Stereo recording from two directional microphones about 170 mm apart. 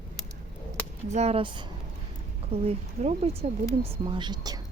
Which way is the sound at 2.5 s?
40° right (ahead or behind).